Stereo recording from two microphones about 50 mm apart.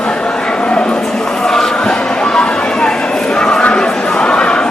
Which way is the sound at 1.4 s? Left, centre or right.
Centre.